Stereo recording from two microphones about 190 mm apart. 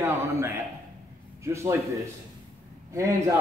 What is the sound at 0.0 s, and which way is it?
A man's voice, 10° right (ahead or behind).